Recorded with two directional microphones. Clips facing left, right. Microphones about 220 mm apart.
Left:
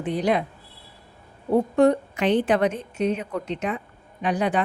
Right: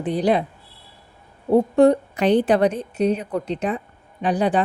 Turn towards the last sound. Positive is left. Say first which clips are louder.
# right 3 dB
turn(degrees=-35)  # may be behind; listen again after turning